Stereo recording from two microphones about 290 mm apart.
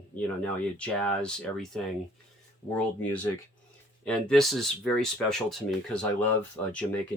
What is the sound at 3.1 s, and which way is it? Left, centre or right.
Speech, centre.